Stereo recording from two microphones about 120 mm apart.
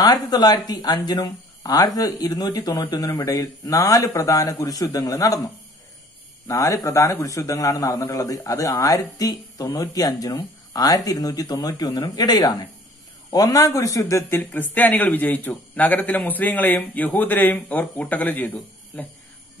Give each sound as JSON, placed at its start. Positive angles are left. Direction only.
{"t": 0.0, "sound": "a man's voice", "side_deg": 30}
{"t": 6.4, "sound": "a man's voice", "side_deg": 25}